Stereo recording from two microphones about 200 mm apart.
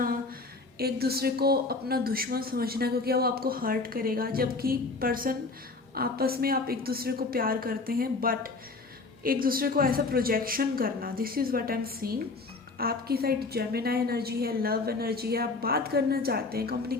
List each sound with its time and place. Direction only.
0.8 s a woman's voice: 50° right (ahead or behind)